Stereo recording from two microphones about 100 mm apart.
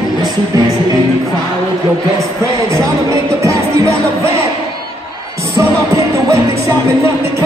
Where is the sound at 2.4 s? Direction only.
30° right (ahead or behind).